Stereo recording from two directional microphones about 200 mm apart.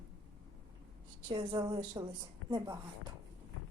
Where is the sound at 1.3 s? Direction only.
20° right (ahead or behind).